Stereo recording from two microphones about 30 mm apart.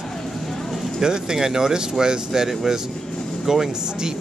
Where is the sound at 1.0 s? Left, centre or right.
Right.